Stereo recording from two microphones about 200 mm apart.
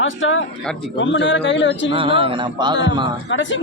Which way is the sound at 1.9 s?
25° right (ahead or behind).